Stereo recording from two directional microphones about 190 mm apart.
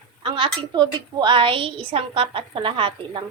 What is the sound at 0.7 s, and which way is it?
A woman's voice, 25° right (ahead or behind).